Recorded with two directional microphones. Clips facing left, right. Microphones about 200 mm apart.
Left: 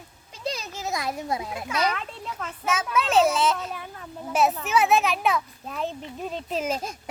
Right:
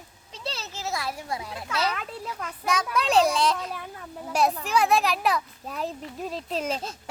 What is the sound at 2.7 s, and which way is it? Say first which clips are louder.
A child's voice: even; 5° left (ahead or behind).